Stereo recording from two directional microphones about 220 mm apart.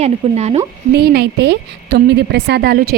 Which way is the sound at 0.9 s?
45° right (ahead or behind).